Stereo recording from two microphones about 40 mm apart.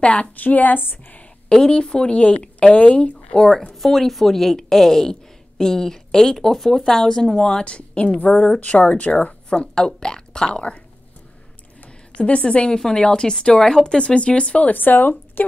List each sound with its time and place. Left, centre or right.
0.0 s a woman's voice: left
0.4 s speech: left
1.5 s a woman's voice: centre
3.3 s a woman's voice: centre
8.5 s speech: left
9.5 s a woman's voice: centre
12.2 s a woman's voice: left
14.7 s speech: left